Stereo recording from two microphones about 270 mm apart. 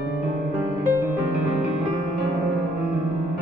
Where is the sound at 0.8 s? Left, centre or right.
Centre.